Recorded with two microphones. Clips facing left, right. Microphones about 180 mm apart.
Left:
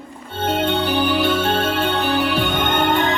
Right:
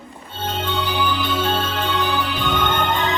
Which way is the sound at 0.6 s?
60° left (ahead or behind).